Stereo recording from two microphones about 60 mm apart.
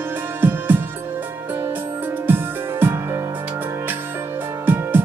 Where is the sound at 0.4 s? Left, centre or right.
Right.